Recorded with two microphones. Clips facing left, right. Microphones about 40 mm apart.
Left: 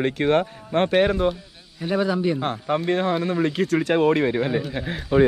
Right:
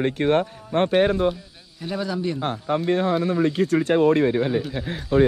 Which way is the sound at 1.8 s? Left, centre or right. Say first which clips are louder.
Left 4 dB; centre.